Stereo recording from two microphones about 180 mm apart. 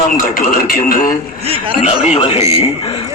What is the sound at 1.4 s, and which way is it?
Speech, 30° right (ahead or behind).